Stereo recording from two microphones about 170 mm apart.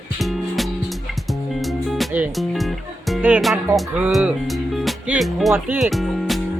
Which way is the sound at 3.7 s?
10° right (ahead or behind).